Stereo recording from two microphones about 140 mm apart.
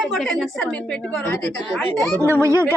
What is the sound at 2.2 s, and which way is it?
Speech, 15° left (ahead or behind).